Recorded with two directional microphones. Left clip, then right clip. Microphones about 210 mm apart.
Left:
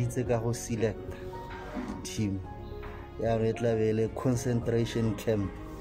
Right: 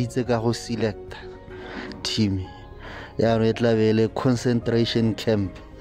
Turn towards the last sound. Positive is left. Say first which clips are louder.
# right 7 dB
turn(degrees=-40)  # may be behind; listen again after turning